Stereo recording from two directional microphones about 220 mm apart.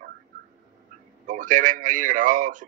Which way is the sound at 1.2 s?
35° right (ahead or behind).